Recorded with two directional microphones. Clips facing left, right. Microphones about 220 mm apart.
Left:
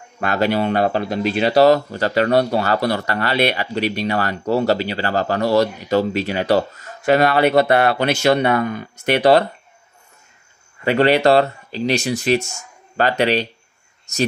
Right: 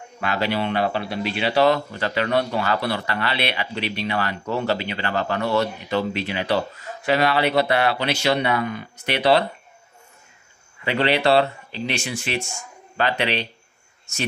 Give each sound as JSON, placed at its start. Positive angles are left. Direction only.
{"t": 0.2, "sound": "speech", "side_deg": 45}
{"t": 10.8, "sound": "speech", "side_deg": 45}